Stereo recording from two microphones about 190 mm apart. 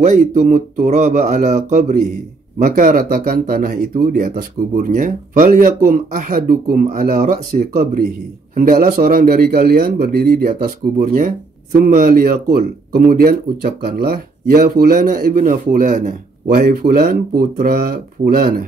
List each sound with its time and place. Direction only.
0.0 s speech: 40° right (ahead or behind)